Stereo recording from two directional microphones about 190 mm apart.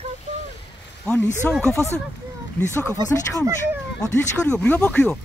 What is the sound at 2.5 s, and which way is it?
Speech, 10° left (ahead or behind).